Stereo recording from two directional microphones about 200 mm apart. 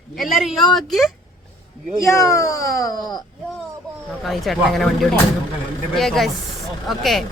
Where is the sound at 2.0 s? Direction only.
15° left (ahead or behind).